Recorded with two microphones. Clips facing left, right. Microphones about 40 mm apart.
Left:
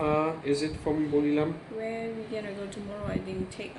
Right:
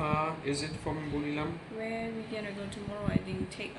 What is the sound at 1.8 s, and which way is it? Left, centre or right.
Speech, centre.